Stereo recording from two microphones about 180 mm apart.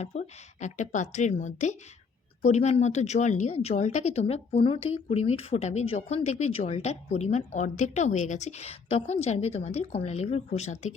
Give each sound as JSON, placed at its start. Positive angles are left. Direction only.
{"t": 0.0, "sound": "speech", "side_deg": 40}